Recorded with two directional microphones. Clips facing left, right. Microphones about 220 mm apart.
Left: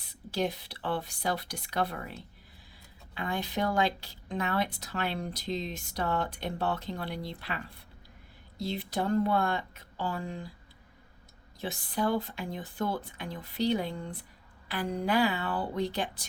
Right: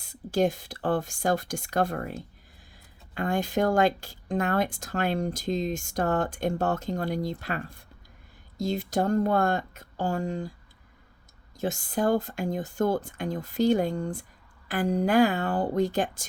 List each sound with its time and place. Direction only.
0.0 s speech: 45° right (ahead or behind)
11.6 s speech: 45° right (ahead or behind)